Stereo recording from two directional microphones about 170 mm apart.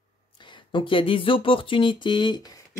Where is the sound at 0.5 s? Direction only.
25° left (ahead or behind).